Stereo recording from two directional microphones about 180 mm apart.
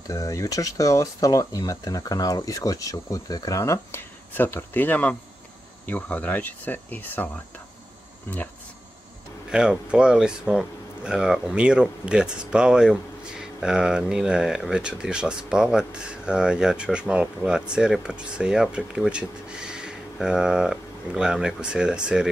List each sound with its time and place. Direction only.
0.1 s speech: 20° left (ahead or behind)
9.5 s speech: 5° right (ahead or behind)